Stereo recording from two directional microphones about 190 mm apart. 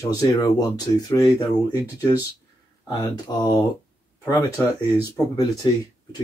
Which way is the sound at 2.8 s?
20° left (ahead or behind).